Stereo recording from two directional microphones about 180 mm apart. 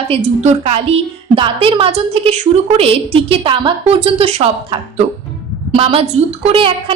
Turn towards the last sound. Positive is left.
turn(degrees=-30)  # may be behind; listen again after turning